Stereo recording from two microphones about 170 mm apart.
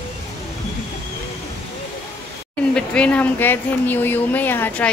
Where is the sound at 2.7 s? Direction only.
5° left (ahead or behind).